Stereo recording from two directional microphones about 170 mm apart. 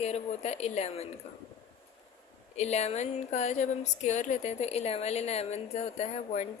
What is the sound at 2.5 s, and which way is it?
Speech, 40° left (ahead or behind).